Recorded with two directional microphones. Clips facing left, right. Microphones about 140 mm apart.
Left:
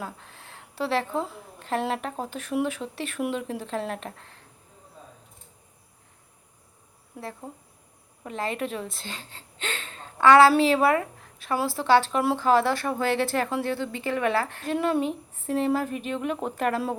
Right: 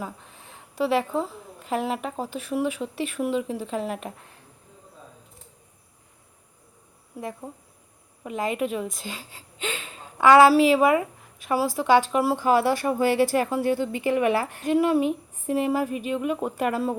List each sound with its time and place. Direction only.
0.0 s a woman's voice: 5° right (ahead or behind)
7.1 s a woman's voice: 5° right (ahead or behind)